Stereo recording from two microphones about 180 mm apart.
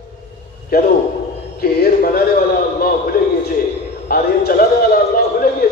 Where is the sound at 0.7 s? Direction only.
60° left (ahead or behind).